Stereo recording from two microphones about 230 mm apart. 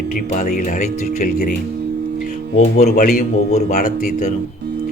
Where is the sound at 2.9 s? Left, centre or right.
Left.